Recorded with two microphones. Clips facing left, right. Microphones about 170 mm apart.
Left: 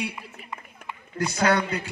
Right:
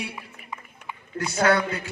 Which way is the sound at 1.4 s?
35° left (ahead or behind).